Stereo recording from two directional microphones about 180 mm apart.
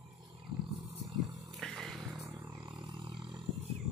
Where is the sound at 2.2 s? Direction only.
20° right (ahead or behind).